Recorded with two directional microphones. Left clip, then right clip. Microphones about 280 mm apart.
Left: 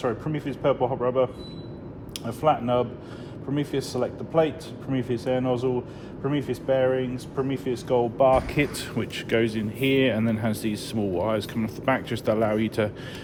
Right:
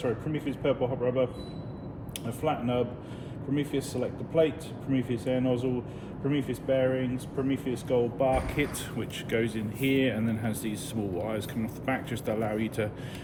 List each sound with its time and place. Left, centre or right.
0.0 s speech: left
2.4 s speech: left